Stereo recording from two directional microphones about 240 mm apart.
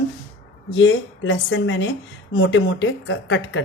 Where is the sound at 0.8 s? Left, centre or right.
Left.